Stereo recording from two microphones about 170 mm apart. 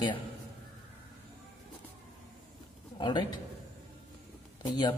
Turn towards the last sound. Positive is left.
turn(degrees=25)  # may be behind; listen again after turning